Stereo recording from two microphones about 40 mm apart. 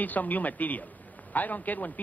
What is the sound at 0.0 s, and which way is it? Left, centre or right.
A man's voice, left.